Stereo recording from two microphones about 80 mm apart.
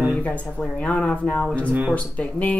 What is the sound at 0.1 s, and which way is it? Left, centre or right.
Speech, centre.